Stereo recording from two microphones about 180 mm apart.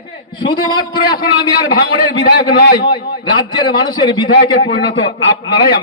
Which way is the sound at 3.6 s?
25° left (ahead or behind).